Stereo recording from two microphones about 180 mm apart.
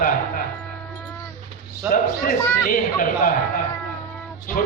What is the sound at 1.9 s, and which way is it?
A man's voice, 50° left (ahead or behind).